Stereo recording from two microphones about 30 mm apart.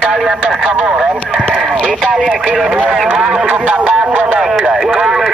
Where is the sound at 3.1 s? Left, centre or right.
Right.